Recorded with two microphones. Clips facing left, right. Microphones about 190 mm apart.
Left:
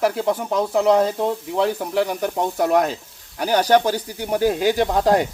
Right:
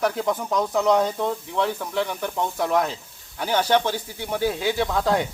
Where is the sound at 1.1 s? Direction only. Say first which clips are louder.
Left 3 dB; 35° left (ahead or behind).